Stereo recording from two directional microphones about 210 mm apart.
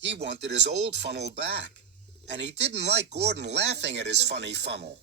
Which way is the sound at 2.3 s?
55° right (ahead or behind).